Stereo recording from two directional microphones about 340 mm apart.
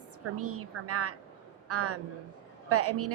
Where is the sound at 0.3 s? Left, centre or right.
Right.